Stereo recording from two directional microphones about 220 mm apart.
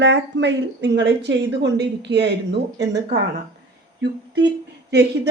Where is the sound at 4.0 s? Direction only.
50° right (ahead or behind).